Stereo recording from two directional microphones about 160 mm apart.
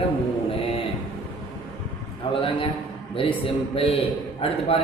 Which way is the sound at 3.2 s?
35° left (ahead or behind).